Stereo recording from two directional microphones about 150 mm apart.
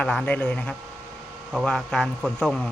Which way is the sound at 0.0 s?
10° left (ahead or behind).